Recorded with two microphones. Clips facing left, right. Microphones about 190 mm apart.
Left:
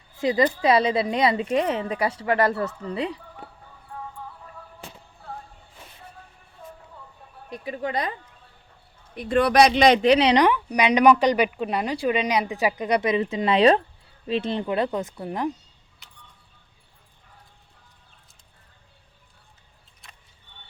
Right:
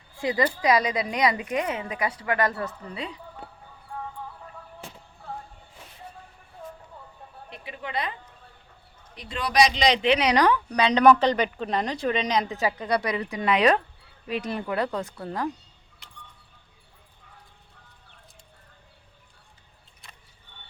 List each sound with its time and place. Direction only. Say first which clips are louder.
0.2 s a woman's voice: left 4 dB; 20° left (ahead or behind)
7.5 s a woman's voice: left 5 dB; 40° left (ahead or behind)
9.1 s a woman's voice: left 6 dB; 55° left (ahead or behind); by 15.4 s 20° left (ahead or behind)